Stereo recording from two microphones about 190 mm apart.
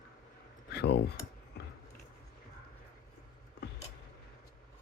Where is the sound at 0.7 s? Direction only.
60° left (ahead or behind).